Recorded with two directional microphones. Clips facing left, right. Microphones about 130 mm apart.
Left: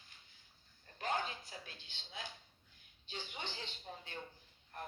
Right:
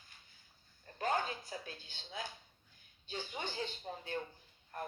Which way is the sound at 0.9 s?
40° right (ahead or behind).